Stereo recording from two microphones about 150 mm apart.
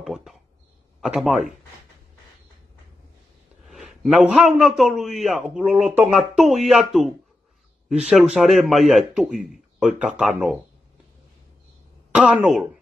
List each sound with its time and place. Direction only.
0.0 s a sound: centre (ahead or behind)
1.0 s a man's voice: centre (ahead or behind)
3.6 s a man's voice: centre (ahead or behind)
12.1 s speech: 5° right (ahead or behind)